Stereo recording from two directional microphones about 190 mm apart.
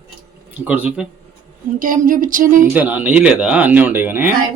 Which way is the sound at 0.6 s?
10° right (ahead or behind).